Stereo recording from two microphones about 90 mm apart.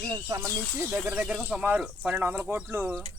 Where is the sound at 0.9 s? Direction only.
15° right (ahead or behind).